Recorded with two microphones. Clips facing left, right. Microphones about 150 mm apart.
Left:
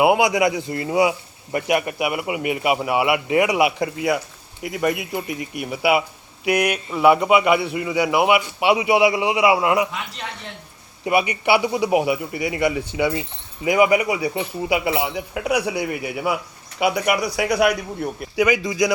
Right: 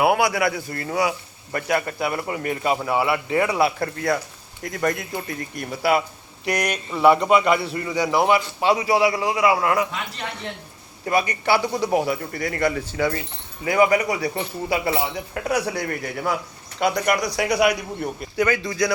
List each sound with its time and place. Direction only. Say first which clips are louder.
0.0 s a man's voice: left 3 dB; 20° left (ahead or behind)
11.0 s speech: left 2 dB; 15° left (ahead or behind)
18.3 s speech: left 3 dB; 15° left (ahead or behind)